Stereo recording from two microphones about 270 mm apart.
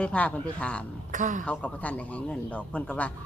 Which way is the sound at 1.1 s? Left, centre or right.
Right.